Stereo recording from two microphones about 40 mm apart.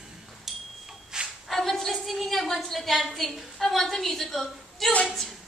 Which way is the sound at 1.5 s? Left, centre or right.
Centre.